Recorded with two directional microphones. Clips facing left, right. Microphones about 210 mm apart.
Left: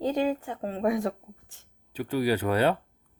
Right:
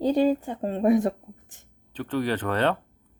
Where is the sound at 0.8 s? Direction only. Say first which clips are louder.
Right 6 dB; 20° right (ahead or behind).